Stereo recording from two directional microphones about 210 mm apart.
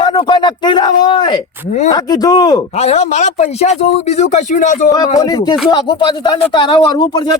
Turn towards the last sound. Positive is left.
turn(degrees=20)  # may be behind; listen again after turning